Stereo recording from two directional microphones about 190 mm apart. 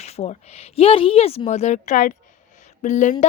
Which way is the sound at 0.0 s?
35° left (ahead or behind).